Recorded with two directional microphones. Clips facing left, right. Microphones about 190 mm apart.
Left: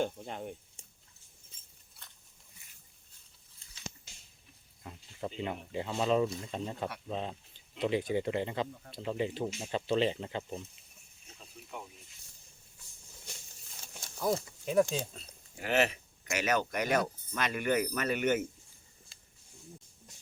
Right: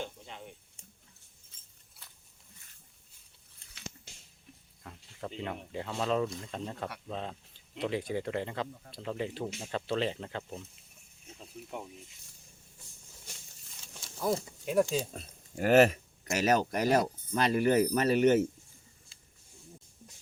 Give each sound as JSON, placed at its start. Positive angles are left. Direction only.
{"t": 0.0, "sound": "speech", "side_deg": 50}
{"t": 2.0, "sound": "a sound", "side_deg": -5}
{"t": 4.8, "sound": "speech", "side_deg": 10}
{"t": 14.2, "sound": "speech", "side_deg": 0}
{"t": 15.1, "sound": "speech", "side_deg": -50}